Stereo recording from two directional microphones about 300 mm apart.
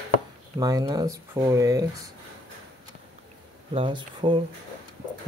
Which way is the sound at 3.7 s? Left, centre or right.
Centre.